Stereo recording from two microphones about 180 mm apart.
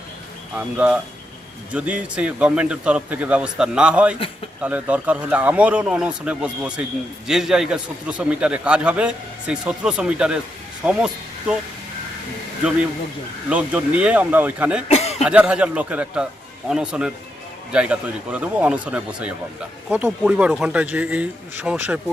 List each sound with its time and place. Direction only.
0.5 s a man's voice: 10° right (ahead or behind)
13.5 s speech: 5° right (ahead or behind)
14.8 s a sound: 35° left (ahead or behind)
15.2 s a man's voice: 5° right (ahead or behind)